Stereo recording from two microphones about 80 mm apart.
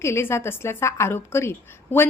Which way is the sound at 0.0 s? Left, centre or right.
Left.